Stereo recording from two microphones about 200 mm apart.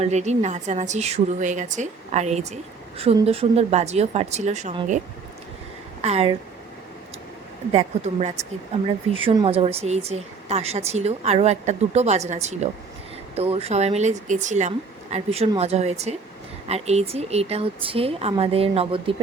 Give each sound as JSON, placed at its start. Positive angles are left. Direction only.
{"t": 0.0, "sound": "speech", "side_deg": -35}
{"t": 6.0, "sound": "speech", "side_deg": -30}
{"t": 7.7, "sound": "speech", "side_deg": -30}
{"t": 9.1, "sound": "a woman's voice", "side_deg": -25}